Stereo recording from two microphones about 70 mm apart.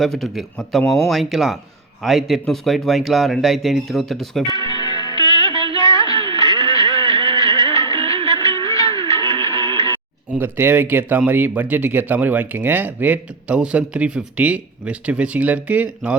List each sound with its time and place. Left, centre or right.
0.0 s speech: centre
4.4 s music: left
10.3 s speech: right
13.5 s speech: centre